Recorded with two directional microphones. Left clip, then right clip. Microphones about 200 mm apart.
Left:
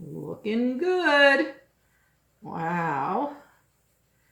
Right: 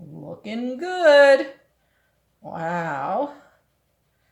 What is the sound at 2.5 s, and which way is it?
Speech, 45° right (ahead or behind).